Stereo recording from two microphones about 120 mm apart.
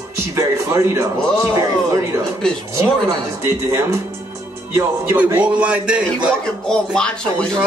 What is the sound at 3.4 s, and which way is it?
Speech, 20° right (ahead or behind).